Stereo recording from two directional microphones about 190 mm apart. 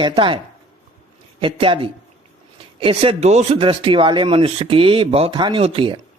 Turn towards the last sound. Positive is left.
turn(degrees=-25)  # may be behind; listen again after turning